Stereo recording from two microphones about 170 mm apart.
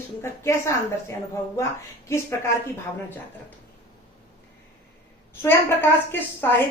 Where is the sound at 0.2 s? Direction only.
15° left (ahead or behind).